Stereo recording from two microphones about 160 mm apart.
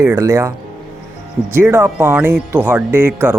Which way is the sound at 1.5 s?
15° right (ahead or behind).